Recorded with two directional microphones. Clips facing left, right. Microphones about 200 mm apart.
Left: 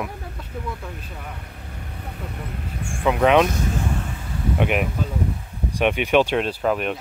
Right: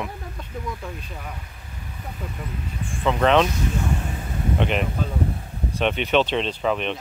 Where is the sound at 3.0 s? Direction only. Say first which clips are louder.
Left 2 dB; 10° left (ahead or behind).